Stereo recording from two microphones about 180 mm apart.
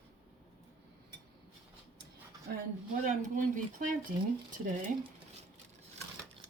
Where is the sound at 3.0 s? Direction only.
45° right (ahead or behind).